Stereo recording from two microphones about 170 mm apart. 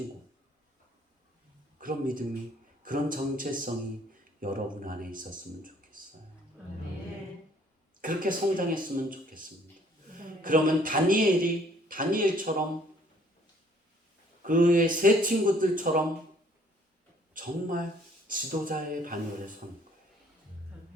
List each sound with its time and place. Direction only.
1.8 s a man's voice: 55° right (ahead or behind)
8.0 s a man's voice: 55° right (ahead or behind)
10.4 s a man's voice: 55° right (ahead or behind)
14.4 s a man's voice: 50° right (ahead or behind)
17.3 s a man's voice: 55° right (ahead or behind)